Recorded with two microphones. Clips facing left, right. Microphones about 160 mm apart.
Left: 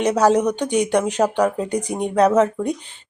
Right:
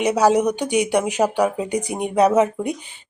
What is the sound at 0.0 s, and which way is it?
Speech, 10° right (ahead or behind).